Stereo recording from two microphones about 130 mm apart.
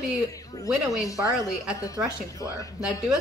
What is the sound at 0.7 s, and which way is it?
Speech, centre (ahead or behind).